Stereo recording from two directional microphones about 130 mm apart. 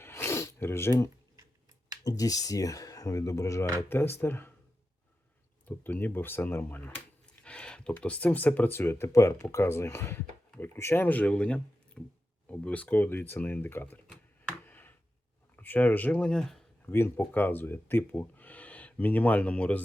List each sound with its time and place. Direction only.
0.0 s sneeze: 20° left (ahead or behind)
2.0 s speech: 30° left (ahead or behind)
5.6 s speech: 15° left (ahead or behind)
14.6 s a sound: 15° left (ahead or behind)
15.5 s speech: 15° left (ahead or behind)
16.9 s speech: 15° left (ahead or behind)